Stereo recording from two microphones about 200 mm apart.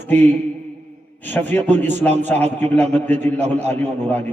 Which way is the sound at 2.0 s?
35° right (ahead or behind).